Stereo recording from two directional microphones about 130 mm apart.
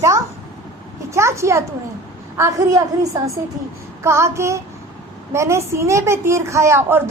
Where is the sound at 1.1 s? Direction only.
20° right (ahead or behind).